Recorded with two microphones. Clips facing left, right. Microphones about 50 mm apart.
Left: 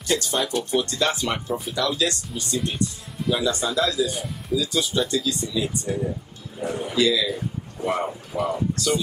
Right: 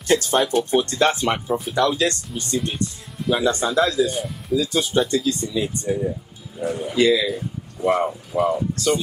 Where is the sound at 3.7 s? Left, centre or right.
Right.